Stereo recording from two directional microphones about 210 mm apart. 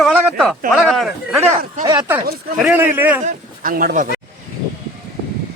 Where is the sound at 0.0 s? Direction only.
Centre (ahead or behind).